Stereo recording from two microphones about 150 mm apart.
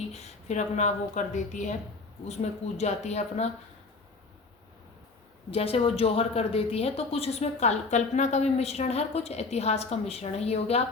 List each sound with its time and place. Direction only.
0.1 s a woman's voice: 45° left (ahead or behind)
5.5 s a woman's voice: 40° left (ahead or behind)